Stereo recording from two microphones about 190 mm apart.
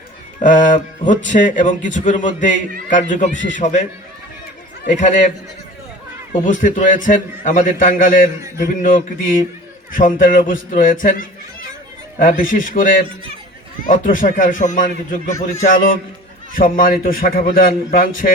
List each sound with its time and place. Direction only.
0.4 s a man's voice: 45° left (ahead or behind)
4.9 s a man's voice: 40° left (ahead or behind)
6.4 s speech: 45° left (ahead or behind)
12.2 s speech: 45° left (ahead or behind)